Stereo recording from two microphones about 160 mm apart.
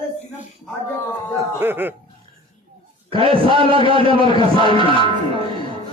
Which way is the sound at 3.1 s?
35° right (ahead or behind).